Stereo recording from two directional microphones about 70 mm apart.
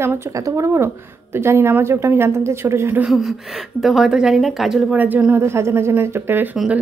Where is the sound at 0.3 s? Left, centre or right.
Right.